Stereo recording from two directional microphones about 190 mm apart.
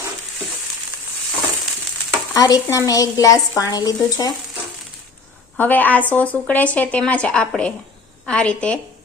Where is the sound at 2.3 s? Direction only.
20° left (ahead or behind).